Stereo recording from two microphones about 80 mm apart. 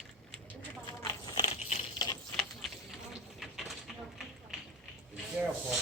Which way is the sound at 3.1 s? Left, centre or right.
Centre.